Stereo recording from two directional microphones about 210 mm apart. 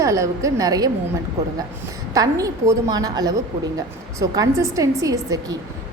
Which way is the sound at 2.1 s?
15° right (ahead or behind).